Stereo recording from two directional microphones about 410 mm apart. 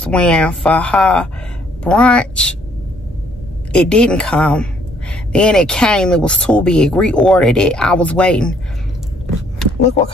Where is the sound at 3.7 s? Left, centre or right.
Centre.